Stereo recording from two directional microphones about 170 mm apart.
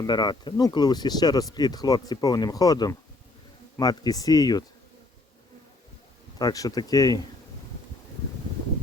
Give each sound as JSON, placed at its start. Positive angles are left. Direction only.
{"t": 0.0, "sound": "speech", "side_deg": 25}
{"t": 6.4, "sound": "speech", "side_deg": 20}